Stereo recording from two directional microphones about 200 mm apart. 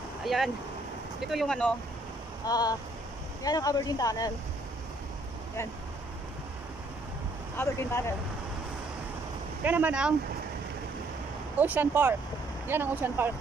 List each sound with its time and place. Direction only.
0.2 s speech: centre (ahead or behind)
2.4 s speech: 20° left (ahead or behind)
7.5 s speech: 15° left (ahead or behind)
9.6 s speech: 10° right (ahead or behind)
11.5 s speech: 10° right (ahead or behind)